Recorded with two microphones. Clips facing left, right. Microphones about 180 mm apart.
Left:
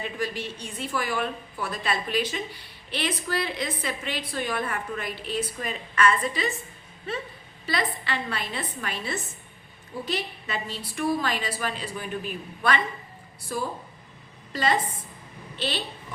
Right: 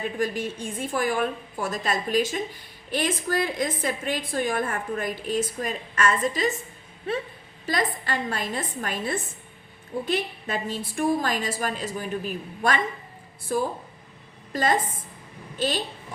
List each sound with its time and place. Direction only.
0.0 s a woman's voice: 50° right (ahead or behind)
7.7 s a woman's voice: 45° right (ahead or behind)